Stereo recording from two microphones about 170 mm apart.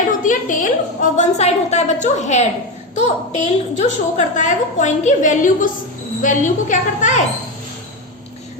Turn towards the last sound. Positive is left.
turn(degrees=50)  # may be behind; listen again after turning